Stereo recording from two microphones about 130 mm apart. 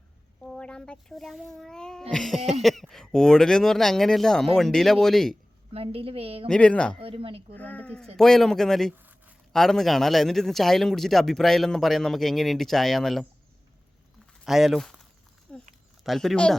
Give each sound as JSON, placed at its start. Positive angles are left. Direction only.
{"t": 0.4, "sound": "a man's voice", "side_deg": 5}
{"t": 5.7, "sound": "a woman's voice", "side_deg": -50}
{"t": 6.5, "sound": "speech", "side_deg": 10}
{"t": 7.0, "sound": "a woman's voice", "side_deg": -45}
{"t": 7.5, "sound": "a man's voice", "side_deg": 15}
{"t": 14.4, "sound": "speech", "side_deg": 0}
{"t": 15.5, "sound": "a sound", "side_deg": 5}
{"t": 16.0, "sound": "a man's voice", "side_deg": 0}